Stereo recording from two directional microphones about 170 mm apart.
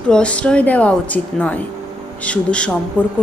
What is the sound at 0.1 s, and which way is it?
A woman's voice, 5° left (ahead or behind).